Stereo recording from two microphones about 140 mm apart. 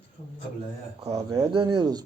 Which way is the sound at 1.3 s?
35° right (ahead or behind).